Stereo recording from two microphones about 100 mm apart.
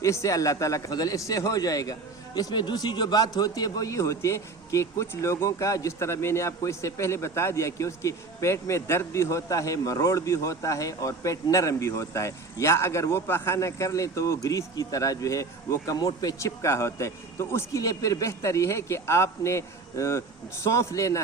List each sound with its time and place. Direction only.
0.0 s a man's voice: 30° left (ahead or behind)